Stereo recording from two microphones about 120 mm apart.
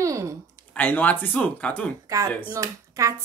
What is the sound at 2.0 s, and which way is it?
Speech, 30° right (ahead or behind).